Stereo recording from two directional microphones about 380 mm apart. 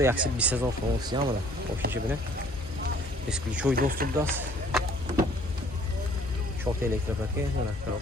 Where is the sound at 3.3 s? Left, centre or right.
Centre.